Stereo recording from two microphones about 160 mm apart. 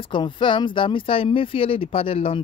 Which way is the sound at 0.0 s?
30° left (ahead or behind).